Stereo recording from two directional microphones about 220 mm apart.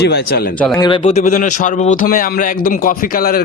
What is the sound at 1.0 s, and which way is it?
A man's voice, 30° left (ahead or behind).